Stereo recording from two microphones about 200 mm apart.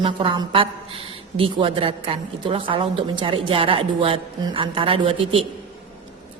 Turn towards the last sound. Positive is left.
turn(degrees=-25)  # may be behind; listen again after turning